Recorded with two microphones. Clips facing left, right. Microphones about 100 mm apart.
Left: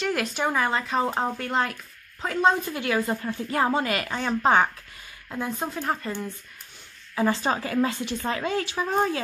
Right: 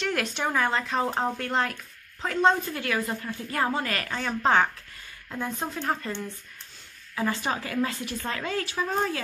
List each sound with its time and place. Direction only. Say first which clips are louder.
0.0 s speech: left 2 dB; 5° left (ahead or behind)
2.7 s a woman's voice: left 3 dB; 25° left (ahead or behind); by 6.3 s 5° left (ahead or behind)
7.2 s a woman's voice: left 4 dB; 30° left (ahead or behind)